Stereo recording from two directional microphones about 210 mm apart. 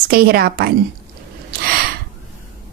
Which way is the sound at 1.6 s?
50° right (ahead or behind).